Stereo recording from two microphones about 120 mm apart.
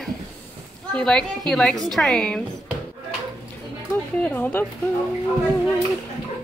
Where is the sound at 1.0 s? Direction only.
5° left (ahead or behind).